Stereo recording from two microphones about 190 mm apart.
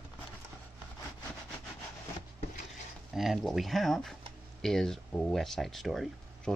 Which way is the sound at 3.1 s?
Centre (ahead or behind).